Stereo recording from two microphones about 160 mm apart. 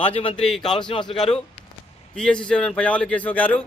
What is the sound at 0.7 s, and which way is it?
Speech, 30° left (ahead or behind).